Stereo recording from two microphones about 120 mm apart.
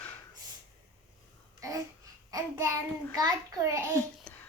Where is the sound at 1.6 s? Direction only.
30° right (ahead or behind).